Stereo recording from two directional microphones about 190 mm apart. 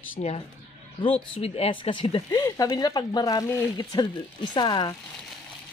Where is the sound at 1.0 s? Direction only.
30° left (ahead or behind).